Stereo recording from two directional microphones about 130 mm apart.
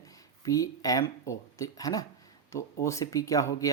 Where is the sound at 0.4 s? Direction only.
25° left (ahead or behind).